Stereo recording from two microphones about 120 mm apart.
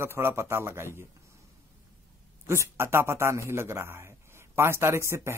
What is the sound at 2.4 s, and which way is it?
Speech, 20° right (ahead or behind).